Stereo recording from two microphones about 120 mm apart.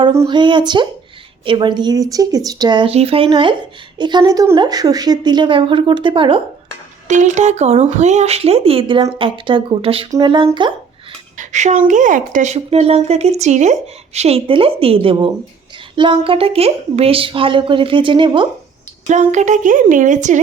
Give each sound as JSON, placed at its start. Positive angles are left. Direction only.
{"t": 0.3, "sound": "a woman's voice", "side_deg": -40}
{"t": 2.9, "sound": "a woman's voice", "side_deg": -55}
{"t": 7.1, "sound": "a woman's voice", "side_deg": -85}
{"t": 10.1, "sound": "a woman's voice", "side_deg": -40}
{"t": 11.3, "sound": "a sound", "side_deg": -80}
{"t": 11.9, "sound": "a woman's voice", "side_deg": -90}
{"t": 19.0, "sound": "a woman's voice", "side_deg": -80}